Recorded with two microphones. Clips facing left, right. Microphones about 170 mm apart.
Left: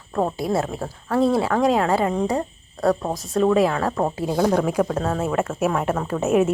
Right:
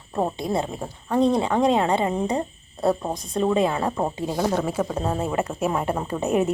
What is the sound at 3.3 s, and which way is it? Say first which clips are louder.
Speech: left 3 dB; 20° right (ahead or behind).